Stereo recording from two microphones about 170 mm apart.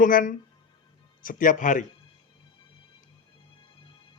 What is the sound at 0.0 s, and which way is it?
Speech, 50° left (ahead or behind).